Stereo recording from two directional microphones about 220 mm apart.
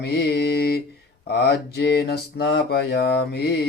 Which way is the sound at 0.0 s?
50° left (ahead or behind).